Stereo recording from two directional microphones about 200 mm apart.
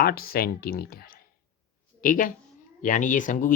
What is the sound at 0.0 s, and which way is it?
Speech, 50° left (ahead or behind).